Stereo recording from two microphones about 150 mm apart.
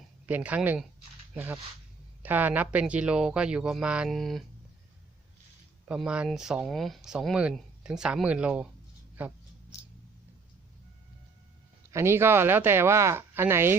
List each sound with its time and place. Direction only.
0.3 s speech: 10° right (ahead or behind)
5.9 s speech: 5° right (ahead or behind)
9.1 s a sound: 10° right (ahead or behind)
11.9 s speech: 20° right (ahead or behind)